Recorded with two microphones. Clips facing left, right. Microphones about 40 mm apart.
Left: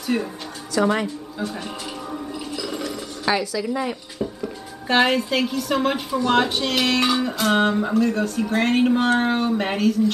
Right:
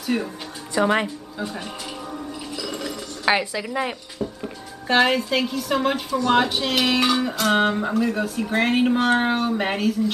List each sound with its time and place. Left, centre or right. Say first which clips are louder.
0.0 s speech: left 1 dB; centre
0.7 s speech: even; right
2.1 s a sound: left 2 dB; centre
3.3 s speech: right 1 dB; right
4.8 s speech: even; centre